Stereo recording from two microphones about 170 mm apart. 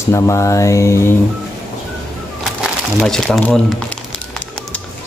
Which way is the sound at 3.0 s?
Centre (ahead or behind).